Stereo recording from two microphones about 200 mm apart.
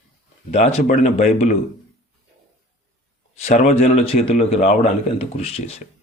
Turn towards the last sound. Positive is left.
turn(degrees=30)  # may be behind; listen again after turning